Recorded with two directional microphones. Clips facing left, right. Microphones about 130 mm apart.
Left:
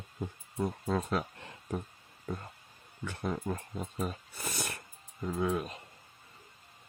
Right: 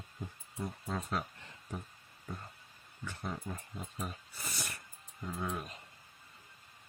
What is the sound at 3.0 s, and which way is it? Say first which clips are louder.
Speech: left 6 dB; 60° left (ahead or behind).